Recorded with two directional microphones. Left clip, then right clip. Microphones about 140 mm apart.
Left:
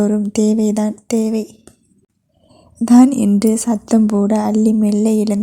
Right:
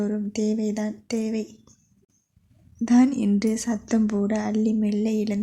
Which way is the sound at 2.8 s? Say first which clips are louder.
Left 9 dB; 40° left (ahead or behind).